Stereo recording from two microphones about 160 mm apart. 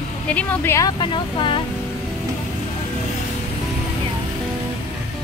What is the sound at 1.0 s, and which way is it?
Speech, 30° left (ahead or behind).